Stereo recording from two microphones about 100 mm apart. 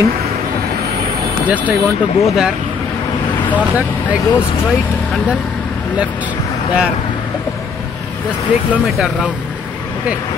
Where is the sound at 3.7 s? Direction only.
15° right (ahead or behind).